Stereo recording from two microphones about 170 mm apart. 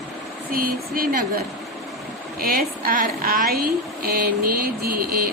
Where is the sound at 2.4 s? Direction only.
60° right (ahead or behind).